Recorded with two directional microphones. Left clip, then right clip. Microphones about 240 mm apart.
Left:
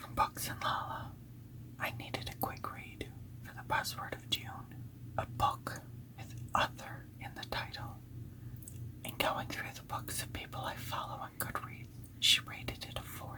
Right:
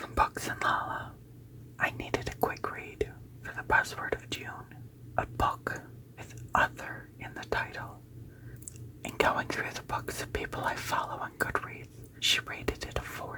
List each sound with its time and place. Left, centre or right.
0.0 s speech: right
5.1 s whispering: right
9.0 s speech: right
12.2 s whispering: right